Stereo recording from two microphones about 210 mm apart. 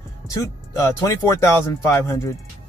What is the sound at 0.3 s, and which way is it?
Speech, 15° left (ahead or behind).